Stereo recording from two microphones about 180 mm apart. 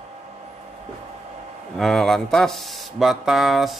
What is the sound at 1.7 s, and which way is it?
Speech, centre (ahead or behind).